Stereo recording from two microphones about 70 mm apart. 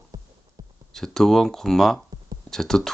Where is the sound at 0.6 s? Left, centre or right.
Right.